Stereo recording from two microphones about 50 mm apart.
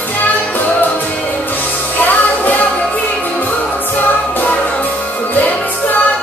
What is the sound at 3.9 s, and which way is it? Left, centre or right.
Music, left.